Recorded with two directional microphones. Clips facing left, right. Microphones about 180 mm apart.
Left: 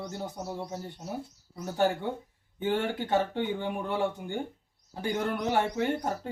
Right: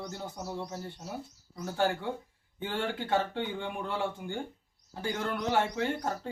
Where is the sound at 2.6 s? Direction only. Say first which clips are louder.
Left 5 dB; 20° left (ahead or behind).